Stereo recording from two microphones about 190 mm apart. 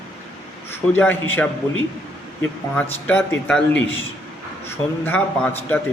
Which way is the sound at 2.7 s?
10° left (ahead or behind).